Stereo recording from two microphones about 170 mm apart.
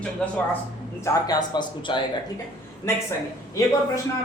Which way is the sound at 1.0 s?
25° left (ahead or behind).